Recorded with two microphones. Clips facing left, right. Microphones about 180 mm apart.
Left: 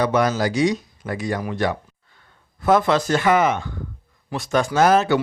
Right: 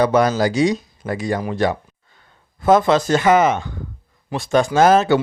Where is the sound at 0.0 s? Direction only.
30° right (ahead or behind).